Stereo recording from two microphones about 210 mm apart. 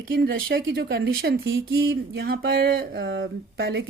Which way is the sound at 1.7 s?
70° right (ahead or behind).